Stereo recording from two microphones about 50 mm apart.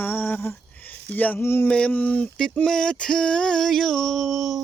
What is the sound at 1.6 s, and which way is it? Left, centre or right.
Music, left.